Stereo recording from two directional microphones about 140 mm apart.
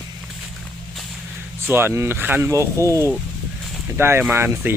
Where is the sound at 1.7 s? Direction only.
15° right (ahead or behind).